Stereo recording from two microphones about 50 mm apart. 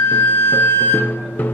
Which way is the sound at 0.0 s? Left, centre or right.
Left.